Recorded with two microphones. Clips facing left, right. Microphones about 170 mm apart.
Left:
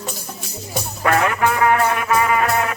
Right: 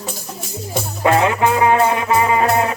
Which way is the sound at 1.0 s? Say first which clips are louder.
Right 3 dB; 20° right (ahead or behind).